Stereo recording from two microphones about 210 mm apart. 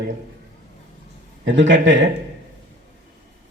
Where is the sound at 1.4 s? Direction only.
60° right (ahead or behind).